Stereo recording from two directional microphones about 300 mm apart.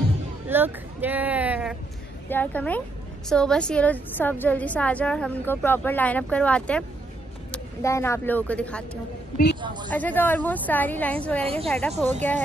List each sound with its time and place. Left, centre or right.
0.5 s a woman's voice: centre
9.8 s a woman's voice: centre